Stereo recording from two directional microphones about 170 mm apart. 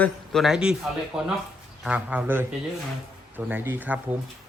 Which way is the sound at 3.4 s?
10° right (ahead or behind).